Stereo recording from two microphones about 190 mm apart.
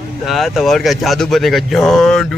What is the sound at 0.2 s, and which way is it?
Speech, centre (ahead or behind).